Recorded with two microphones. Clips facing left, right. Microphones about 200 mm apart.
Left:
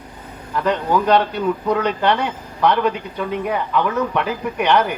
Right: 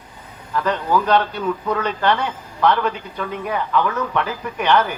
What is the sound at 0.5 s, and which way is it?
Speech, 15° left (ahead or behind).